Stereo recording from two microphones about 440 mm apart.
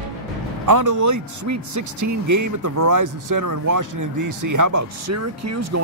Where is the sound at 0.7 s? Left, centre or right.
Right.